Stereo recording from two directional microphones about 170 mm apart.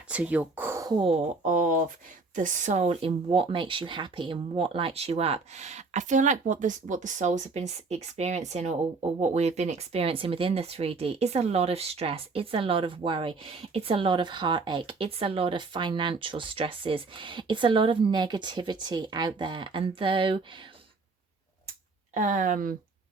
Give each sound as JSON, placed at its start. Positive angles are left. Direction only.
{"t": 0.1, "sound": "speech", "side_deg": -10}
{"t": 1.4, "sound": "a sound", "side_deg": -50}
{"t": 2.3, "sound": "speech", "side_deg": -45}
{"t": 22.1, "sound": "speech", "side_deg": -50}